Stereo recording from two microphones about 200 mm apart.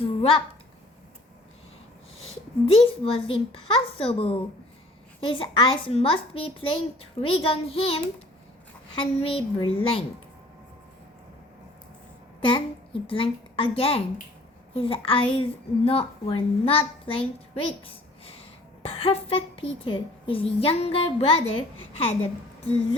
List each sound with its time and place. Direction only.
0.0 s a sound: 30° left (ahead or behind)
2.8 s speech: 25° left (ahead or behind)
12.4 s a child's voice: 25° left (ahead or behind)
18.8 s a woman's voice: 30° left (ahead or behind)